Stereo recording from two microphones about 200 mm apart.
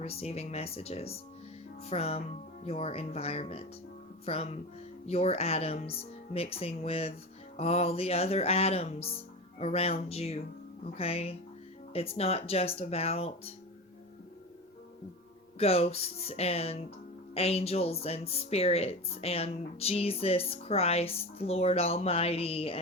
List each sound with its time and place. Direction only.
0.0 s a woman's voice: 30° left (ahead or behind)
15.5 s a woman's voice: 30° left (ahead or behind)